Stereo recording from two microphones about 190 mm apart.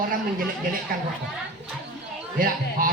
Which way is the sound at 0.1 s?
45° right (ahead or behind).